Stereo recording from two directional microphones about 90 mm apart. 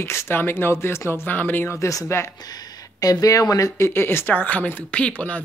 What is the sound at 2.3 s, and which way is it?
A woman's voice, 45° left (ahead or behind).